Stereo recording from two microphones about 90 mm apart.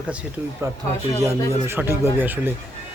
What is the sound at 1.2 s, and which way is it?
Speech, 30° right (ahead or behind).